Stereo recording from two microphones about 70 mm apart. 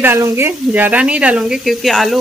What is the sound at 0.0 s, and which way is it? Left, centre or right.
Speech, right.